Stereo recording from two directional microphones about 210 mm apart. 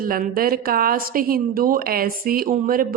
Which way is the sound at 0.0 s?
45° right (ahead or behind).